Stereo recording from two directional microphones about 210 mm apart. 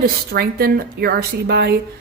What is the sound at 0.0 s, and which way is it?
A woman's voice, 45° right (ahead or behind).